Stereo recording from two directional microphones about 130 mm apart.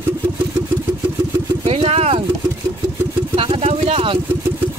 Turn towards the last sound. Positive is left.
turn(degrees=-45)  # may be behind; listen again after turning